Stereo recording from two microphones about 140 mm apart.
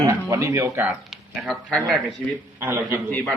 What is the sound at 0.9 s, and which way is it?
Speech, centre (ahead or behind).